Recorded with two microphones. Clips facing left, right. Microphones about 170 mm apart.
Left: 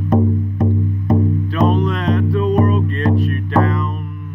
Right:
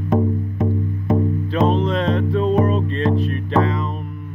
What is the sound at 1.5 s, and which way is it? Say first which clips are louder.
Music: even; 30° right (ahead or behind).